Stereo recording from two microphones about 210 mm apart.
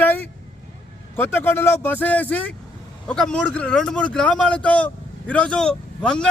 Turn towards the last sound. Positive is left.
turn(degrees=5)  # may be behind; listen again after turning